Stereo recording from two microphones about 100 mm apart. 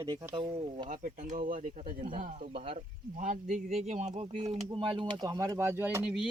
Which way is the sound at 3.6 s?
90° right.